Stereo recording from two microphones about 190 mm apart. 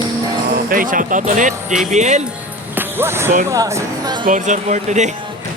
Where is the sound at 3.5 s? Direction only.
15° right (ahead or behind).